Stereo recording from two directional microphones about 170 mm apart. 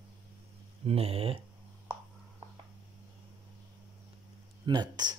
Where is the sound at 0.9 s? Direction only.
35° right (ahead or behind).